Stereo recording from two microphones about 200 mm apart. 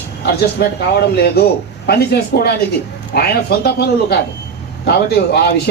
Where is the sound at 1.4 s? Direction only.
55° left (ahead or behind).